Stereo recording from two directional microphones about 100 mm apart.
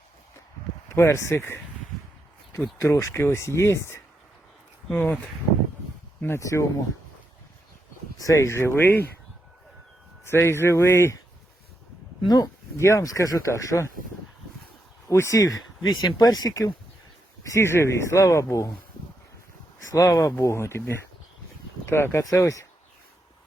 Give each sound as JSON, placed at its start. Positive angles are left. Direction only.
{"t": 0.9, "sound": "speech", "side_deg": 30}
{"t": 2.7, "sound": "speech", "side_deg": 30}
{"t": 6.2, "sound": "speech", "side_deg": 30}
{"t": 8.2, "sound": "speech", "side_deg": 30}
{"t": 10.2, "sound": "speech", "side_deg": 25}
{"t": 12.3, "sound": "speech", "side_deg": 40}
{"t": 15.1, "sound": "speech", "side_deg": 30}
{"t": 19.9, "sound": "speech", "side_deg": 35}